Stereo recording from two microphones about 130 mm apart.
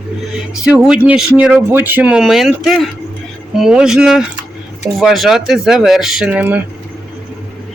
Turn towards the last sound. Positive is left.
turn(degrees=-10)  # may be behind; listen again after turning